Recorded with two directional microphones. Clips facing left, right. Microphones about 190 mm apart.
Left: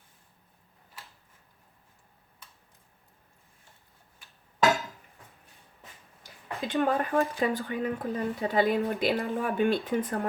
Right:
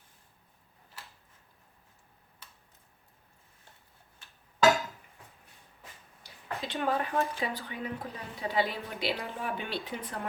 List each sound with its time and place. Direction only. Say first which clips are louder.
6.2 s speech: left 3 dB; 50° left (ahead or behind)